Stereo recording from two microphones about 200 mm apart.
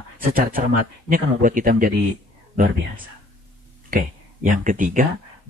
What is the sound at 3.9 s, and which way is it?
Speech, 45° right (ahead or behind).